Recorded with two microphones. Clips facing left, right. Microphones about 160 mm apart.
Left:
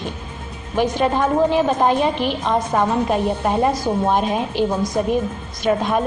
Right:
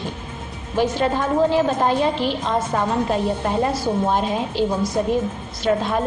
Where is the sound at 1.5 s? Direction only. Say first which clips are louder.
Left 2 dB; 15° left (ahead or behind).